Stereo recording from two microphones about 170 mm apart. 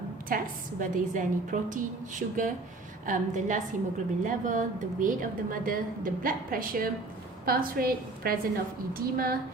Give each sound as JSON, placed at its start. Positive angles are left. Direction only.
{"t": 0.3, "sound": "a woman's voice", "side_deg": -55}